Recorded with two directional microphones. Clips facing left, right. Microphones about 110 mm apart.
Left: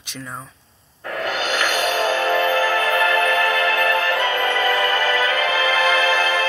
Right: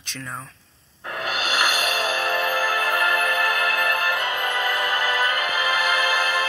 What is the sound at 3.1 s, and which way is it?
Music, 90° left.